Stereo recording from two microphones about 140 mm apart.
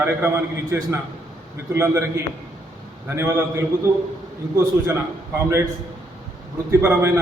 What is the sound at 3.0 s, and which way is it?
Speech, 15° right (ahead or behind).